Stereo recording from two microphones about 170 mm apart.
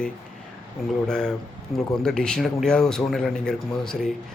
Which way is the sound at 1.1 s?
5° left (ahead or behind).